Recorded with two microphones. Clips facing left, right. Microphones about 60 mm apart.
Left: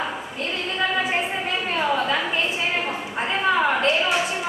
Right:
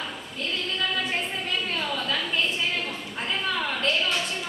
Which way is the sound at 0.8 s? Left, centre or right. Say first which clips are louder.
Left 7 dB; left.